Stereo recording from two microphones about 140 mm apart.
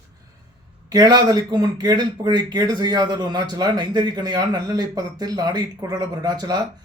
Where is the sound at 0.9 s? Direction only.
30° right (ahead or behind).